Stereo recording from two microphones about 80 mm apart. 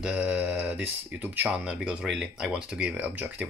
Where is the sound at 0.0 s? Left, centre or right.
Centre.